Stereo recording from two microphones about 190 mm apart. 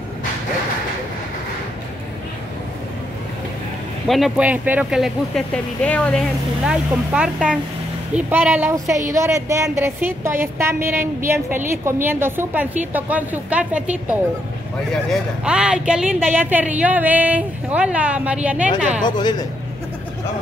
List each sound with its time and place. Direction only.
4.1 s speech: 5° right (ahead or behind)
6.6 s speech: 5° right (ahead or behind)
19.0 s speech: 20° left (ahead or behind)